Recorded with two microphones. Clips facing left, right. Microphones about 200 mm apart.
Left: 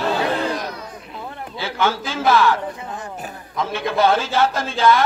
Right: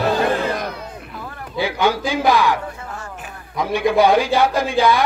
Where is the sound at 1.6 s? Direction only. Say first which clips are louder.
Right 3 dB; 15° right (ahead or behind).